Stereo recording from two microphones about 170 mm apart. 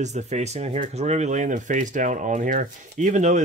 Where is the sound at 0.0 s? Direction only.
45° right (ahead or behind).